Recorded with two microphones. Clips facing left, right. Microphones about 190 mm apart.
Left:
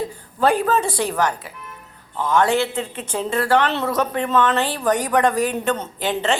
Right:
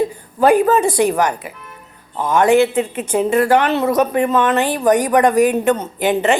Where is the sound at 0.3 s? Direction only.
15° right (ahead or behind).